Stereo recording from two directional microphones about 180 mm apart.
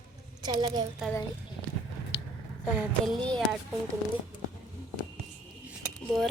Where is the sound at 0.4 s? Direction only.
20° right (ahead or behind).